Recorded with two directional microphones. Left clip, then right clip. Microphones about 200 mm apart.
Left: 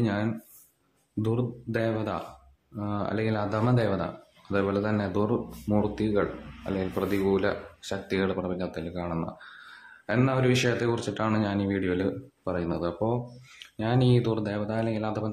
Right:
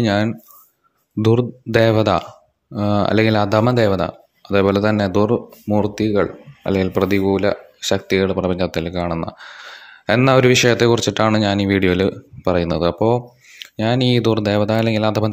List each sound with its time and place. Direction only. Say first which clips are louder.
0.0 s speech: right 11 dB; 40° right (ahead or behind)